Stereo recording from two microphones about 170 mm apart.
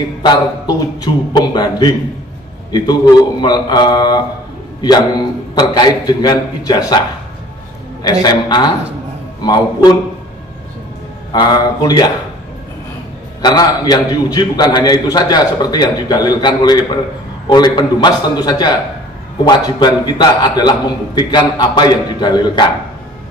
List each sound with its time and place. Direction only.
0.2 s a man's voice: 25° left (ahead or behind)
5.5 s a man's voice: 25° left (ahead or behind)
11.3 s a man's voice: 25° left (ahead or behind)
13.4 s a man's voice: 25° left (ahead or behind)